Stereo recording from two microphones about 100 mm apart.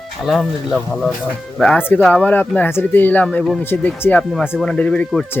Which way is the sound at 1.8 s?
20° left (ahead or behind).